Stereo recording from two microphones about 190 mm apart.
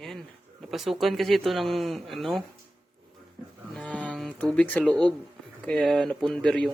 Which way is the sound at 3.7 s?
5° left (ahead or behind).